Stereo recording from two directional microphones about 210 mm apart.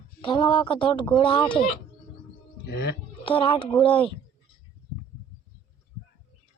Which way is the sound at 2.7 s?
55° left (ahead or behind).